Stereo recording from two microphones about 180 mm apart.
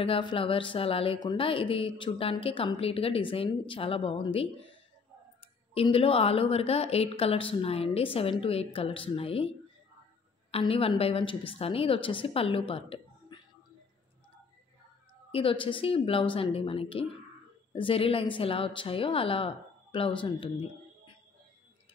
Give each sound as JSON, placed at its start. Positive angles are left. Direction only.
{"t": 0.0, "sound": "a woman's voice", "side_deg": 30}
{"t": 5.8, "sound": "a woman's voice", "side_deg": 30}
{"t": 10.5, "sound": "a woman's voice", "side_deg": 30}
{"t": 15.3, "sound": "a woman's voice", "side_deg": 30}